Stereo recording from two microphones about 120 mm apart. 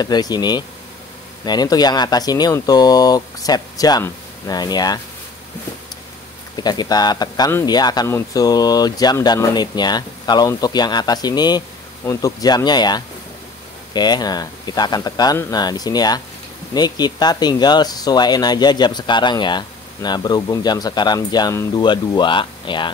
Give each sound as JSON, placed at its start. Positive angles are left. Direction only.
{"t": 0.0, "sound": "speech", "side_deg": 35}
{"t": 6.5, "sound": "speech", "side_deg": 35}